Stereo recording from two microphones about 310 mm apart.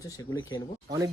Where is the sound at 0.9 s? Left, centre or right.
Centre.